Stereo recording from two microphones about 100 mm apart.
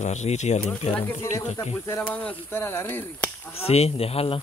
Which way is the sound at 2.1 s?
15° left (ahead or behind).